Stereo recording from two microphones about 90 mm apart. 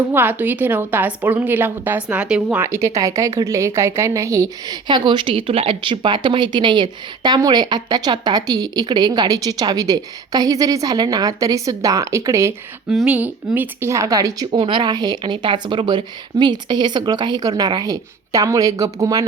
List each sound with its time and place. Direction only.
0.1 s a woman's voice: 20° right (ahead or behind)
2.6 s a woman's voice: 35° right (ahead or behind)
4.7 s a woman's voice: 55° right (ahead or behind); by 12.5 s 30° right (ahead or behind)
13.1 s a woman's voice: 20° right (ahead or behind)
13.9 s a woman's voice: 35° right (ahead or behind)